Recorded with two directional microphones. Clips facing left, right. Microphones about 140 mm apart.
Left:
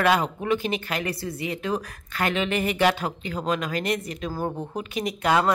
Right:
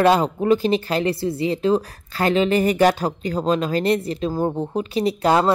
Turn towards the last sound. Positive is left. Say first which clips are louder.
# right 5 dB
turn(degrees=-30)  # may be behind; listen again after turning